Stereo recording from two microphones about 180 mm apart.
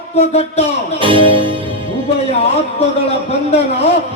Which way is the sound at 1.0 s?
30° right (ahead or behind).